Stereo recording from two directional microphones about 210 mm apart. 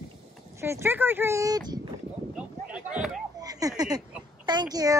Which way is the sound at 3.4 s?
15° right (ahead or behind).